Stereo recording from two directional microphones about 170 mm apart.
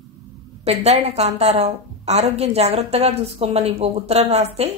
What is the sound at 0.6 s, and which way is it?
A woman's voice, 40° right (ahead or behind).